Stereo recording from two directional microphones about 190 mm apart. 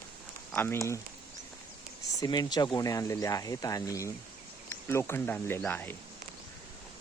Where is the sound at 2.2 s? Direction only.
20° left (ahead or behind).